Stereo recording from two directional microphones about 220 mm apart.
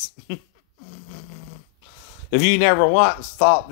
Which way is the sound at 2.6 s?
45° left (ahead or behind).